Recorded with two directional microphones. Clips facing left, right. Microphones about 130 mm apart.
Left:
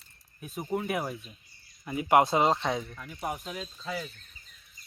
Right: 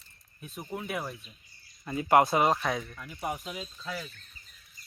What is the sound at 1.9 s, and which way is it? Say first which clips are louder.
Speech: even; 15° left (ahead or behind).